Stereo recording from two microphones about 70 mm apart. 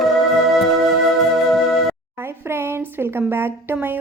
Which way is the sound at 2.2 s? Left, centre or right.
Right.